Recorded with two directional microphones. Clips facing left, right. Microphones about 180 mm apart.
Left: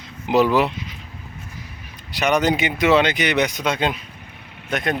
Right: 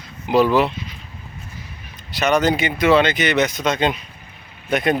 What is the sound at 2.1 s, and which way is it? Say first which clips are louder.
Speech: right 1 dB; 15° left (ahead or behind).